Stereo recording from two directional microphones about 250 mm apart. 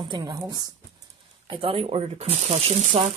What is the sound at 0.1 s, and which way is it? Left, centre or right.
Speech, centre.